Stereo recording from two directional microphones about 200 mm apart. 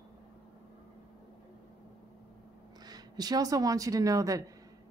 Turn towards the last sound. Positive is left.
turn(degrees=-15)  # may be behind; listen again after turning